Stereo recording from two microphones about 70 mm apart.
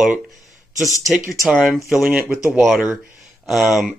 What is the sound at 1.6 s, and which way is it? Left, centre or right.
Speech, centre.